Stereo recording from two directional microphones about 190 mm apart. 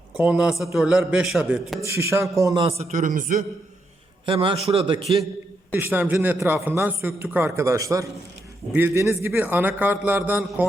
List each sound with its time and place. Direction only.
0.2 s a man's voice: 5° right (ahead or behind)
2.0 s a man's voice: 15° right (ahead or behind)
2.6 s a man's voice: 35° right (ahead or behind)
4.3 s a man's voice: 30° right (ahead or behind)
5.7 s a man's voice: 10° right (ahead or behind)